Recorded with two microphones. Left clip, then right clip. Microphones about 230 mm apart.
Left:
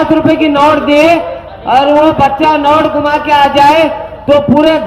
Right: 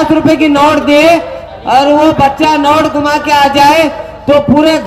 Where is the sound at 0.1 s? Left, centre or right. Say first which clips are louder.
Right 1 dB; right.